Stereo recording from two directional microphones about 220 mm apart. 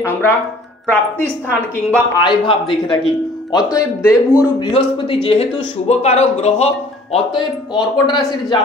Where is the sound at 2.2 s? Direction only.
20° left (ahead or behind).